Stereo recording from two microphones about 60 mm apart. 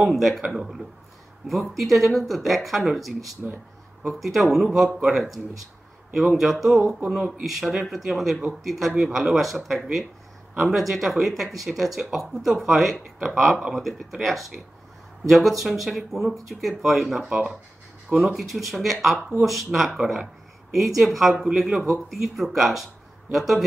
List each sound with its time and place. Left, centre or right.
0.0 s speech: centre
17.3 s speech: centre
18.1 s speech: centre